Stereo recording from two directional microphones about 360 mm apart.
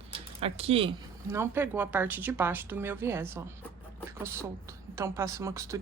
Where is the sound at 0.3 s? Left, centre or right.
Centre.